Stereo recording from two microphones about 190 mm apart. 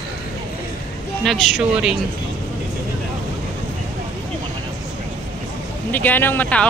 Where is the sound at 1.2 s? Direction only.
Centre (ahead or behind).